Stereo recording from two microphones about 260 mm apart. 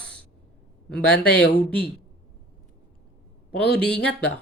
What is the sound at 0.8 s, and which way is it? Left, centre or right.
Speech, centre.